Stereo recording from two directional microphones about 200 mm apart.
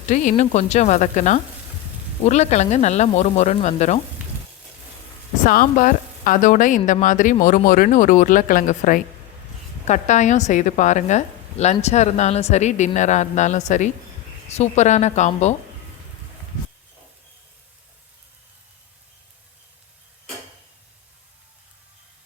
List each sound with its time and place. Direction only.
0.1 s a woman's voice: 40° left (ahead or behind)
5.4 s a woman's voice: 40° left (ahead or behind)